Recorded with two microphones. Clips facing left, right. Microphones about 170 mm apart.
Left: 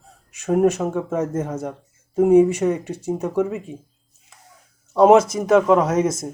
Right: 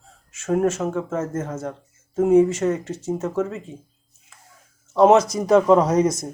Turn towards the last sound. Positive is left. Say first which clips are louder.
# right 1 dB
turn(degrees=5)  # may be behind; listen again after turning